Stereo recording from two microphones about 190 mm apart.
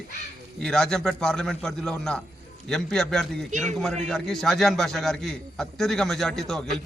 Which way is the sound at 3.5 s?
40° right (ahead or behind).